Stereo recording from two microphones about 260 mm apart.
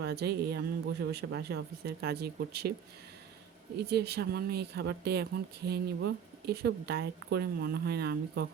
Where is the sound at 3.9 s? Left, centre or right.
Right.